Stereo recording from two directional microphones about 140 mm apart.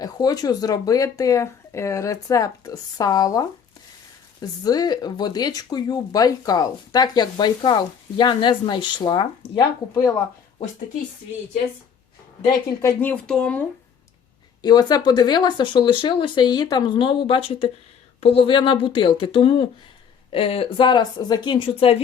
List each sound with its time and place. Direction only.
0.0 s speech: 25° left (ahead or behind)
12.8 s speech: 15° left (ahead or behind)
14.6 s speech: 30° left (ahead or behind)